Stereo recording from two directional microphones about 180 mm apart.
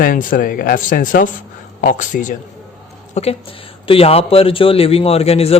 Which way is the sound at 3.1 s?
35° left (ahead or behind).